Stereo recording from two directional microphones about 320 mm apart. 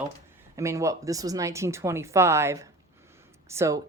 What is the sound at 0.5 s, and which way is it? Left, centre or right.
Speech, centre.